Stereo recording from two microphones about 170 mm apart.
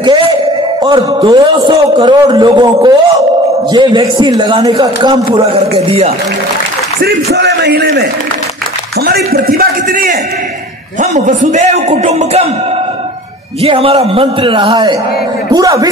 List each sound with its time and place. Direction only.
0.8 s a man's voice: 25° right (ahead or behind)
5.8 s a man's voice: 40° right (ahead or behind)
7.0 s a man's voice: 75° right (ahead or behind)
9.0 s a man's voice: 65° right (ahead or behind)
11.0 s a man's voice: 45° right (ahead or behind)
13.6 s a man's voice: 35° right (ahead or behind)